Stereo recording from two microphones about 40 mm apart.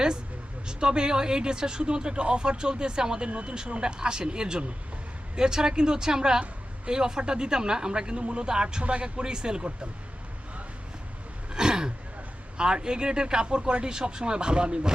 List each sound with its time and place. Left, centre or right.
0.7 s speech: right
11.5 s throat clearing: centre
12.5 s speech: right